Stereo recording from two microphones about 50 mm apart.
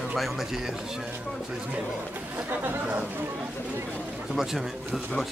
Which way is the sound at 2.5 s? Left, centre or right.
Right.